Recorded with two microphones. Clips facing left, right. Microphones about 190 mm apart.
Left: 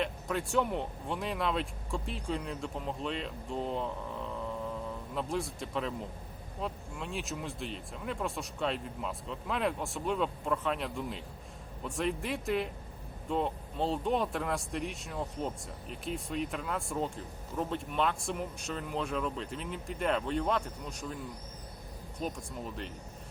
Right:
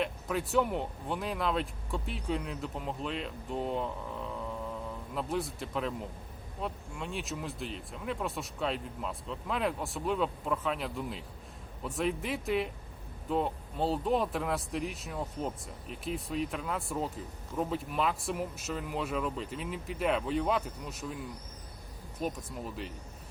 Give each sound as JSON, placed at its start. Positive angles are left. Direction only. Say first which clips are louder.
{"t": 0.0, "sound": "speech", "louder": "right 1 dB", "side_deg": 0}
{"t": 22.2, "sound": "speech", "louder": "right 2 dB", "side_deg": -5}